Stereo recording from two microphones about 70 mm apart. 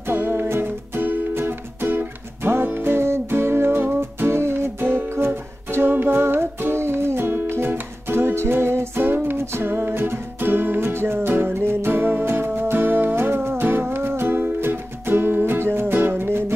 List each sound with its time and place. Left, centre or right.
0.0 s music: right